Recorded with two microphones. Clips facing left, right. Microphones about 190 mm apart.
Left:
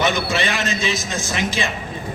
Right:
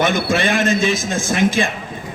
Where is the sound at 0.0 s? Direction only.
50° right (ahead or behind).